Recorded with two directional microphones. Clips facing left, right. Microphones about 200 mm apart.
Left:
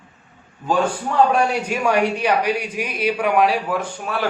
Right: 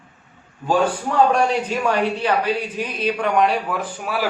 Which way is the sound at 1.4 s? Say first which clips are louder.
Even; 10° left (ahead or behind).